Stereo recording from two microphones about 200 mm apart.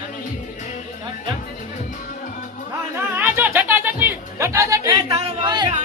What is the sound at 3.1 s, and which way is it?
Speech, 10° right (ahead or behind).